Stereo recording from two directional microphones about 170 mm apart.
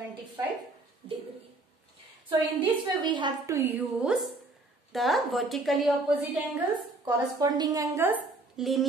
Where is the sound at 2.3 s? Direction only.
25° right (ahead or behind); by 6.1 s centre (ahead or behind).